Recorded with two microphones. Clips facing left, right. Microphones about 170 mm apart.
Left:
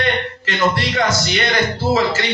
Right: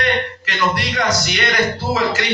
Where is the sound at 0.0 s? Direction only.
25° left (ahead or behind).